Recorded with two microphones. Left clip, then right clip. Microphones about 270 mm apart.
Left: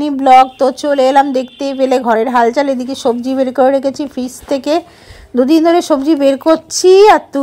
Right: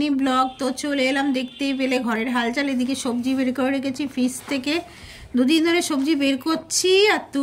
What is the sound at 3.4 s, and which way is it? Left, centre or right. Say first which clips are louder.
Speech: left 14 dB; left.